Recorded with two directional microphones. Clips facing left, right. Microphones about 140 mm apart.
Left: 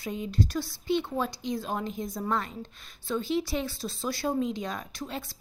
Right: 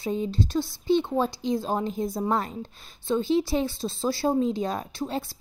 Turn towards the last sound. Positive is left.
turn(degrees=-30)  # may be behind; listen again after turning